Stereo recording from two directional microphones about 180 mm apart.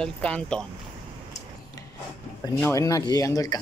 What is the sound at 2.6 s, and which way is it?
Speech, 20° left (ahead or behind).